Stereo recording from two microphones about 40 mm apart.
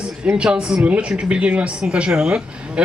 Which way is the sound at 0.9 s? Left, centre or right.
Right.